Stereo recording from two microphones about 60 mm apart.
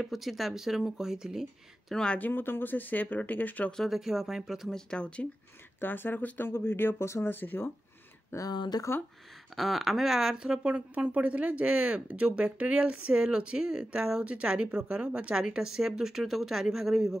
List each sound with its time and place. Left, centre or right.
0.0 s speech: centre
2.1 s speech: left
3.9 s speech: centre
4.6 s speech: centre
5.8 s speech: left
7.3 s speech: left
8.4 s speech: left
9.6 s speech: centre